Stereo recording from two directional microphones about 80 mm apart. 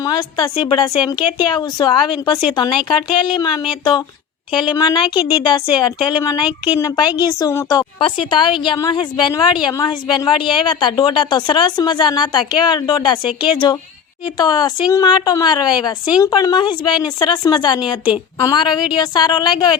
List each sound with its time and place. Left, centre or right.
0.1 s a woman's voice: left
7.9 s a woman's voice: left
8.9 s a woman's voice: left
14.3 s a woman's voice: left
18.9 s a woman's voice: left